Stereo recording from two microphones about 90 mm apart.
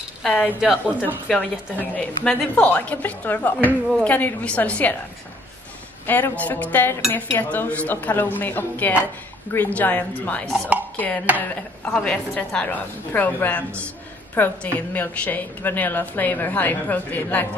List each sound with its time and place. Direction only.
0.2 s speech: 10° left (ahead or behind)
0.5 s a woman's voice: 10° right (ahead or behind)
1.3 s a woman's voice: 15° left (ahead or behind)
6.0 s a woman's voice: 20° left (ahead or behind)